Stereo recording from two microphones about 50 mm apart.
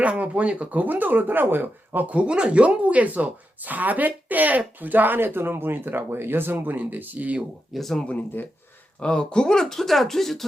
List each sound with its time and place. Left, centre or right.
0.0 s speech: right
2.1 s speech: right
7.7 s speech: centre
9.0 s speech: centre